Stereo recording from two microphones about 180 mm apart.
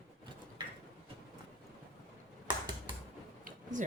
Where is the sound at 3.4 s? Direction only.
45° right (ahead or behind).